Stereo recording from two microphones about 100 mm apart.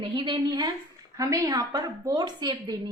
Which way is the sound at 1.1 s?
35° right (ahead or behind).